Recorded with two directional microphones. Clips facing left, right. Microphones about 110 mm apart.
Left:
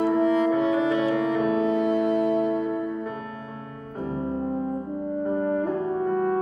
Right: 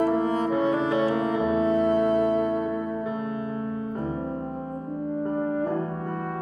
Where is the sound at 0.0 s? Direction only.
40° right (ahead or behind).